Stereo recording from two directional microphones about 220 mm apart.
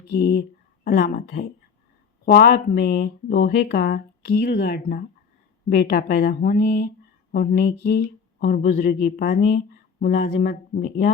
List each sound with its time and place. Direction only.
0.1 s a woman's voice: 45° left (ahead or behind)